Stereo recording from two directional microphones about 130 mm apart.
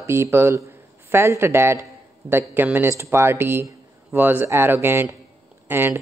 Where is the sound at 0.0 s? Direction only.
20° right (ahead or behind).